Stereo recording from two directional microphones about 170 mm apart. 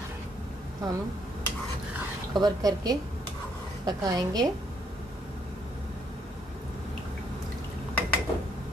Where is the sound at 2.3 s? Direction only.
25° right (ahead or behind).